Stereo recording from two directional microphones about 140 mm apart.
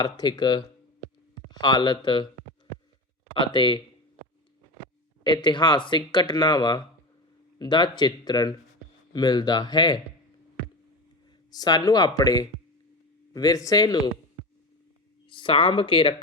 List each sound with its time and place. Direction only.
0.0 s speech: 30° left (ahead or behind)
1.6 s speech: 30° left (ahead or behind)
3.3 s speech: 35° left (ahead or behind)
5.2 s speech: 35° left (ahead or behind)
11.5 s speech: 30° left (ahead or behind)
15.3 s speech: 35° left (ahead or behind)